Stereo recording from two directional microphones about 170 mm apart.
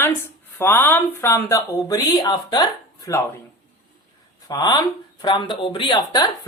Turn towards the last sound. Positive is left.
turn(degrees=25)  # may be behind; listen again after turning